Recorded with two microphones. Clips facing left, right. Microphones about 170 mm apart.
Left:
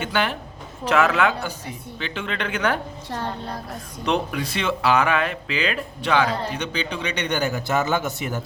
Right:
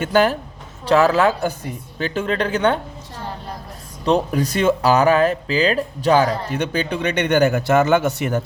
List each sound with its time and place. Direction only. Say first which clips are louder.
0.0 s speech: right 8 dB; 40° right (ahead or behind)
4.0 s speech: right 6 dB; 35° right (ahead or behind); by 8.4 s 65° right (ahead or behind)